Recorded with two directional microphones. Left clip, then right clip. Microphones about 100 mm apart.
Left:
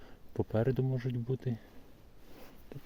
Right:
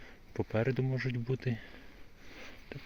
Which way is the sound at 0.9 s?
20° left (ahead or behind).